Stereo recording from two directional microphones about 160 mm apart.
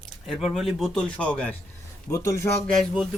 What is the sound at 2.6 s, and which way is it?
Speech, 5° left (ahead or behind).